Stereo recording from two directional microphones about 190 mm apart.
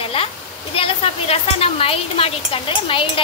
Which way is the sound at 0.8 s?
30° left (ahead or behind).